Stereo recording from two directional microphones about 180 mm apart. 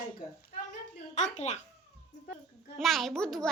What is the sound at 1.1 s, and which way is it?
Music, 40° left (ahead or behind).